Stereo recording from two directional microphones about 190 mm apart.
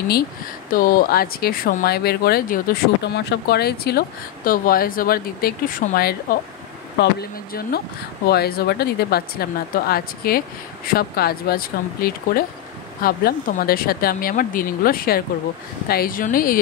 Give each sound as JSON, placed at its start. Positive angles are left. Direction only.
{"t": 0.7, "sound": "speech", "side_deg": 50}